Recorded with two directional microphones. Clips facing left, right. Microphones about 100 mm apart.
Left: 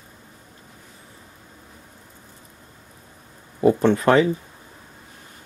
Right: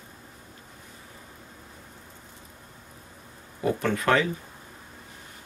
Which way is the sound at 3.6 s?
30° left (ahead or behind).